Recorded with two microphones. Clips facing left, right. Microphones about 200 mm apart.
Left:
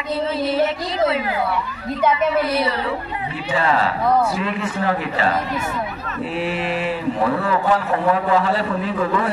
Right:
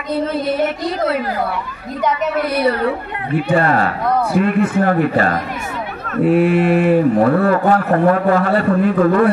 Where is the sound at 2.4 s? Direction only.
55° right (ahead or behind).